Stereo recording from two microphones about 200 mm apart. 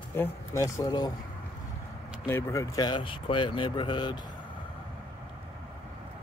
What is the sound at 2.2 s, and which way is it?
Speech, 15° left (ahead or behind).